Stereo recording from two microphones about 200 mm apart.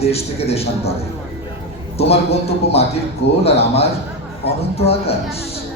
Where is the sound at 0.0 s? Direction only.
30° left (ahead or behind).